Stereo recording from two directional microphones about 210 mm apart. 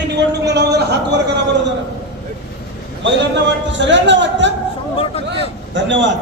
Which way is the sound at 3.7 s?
60° right (ahead or behind).